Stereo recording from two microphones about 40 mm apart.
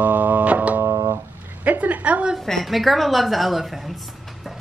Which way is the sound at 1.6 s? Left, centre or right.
Right.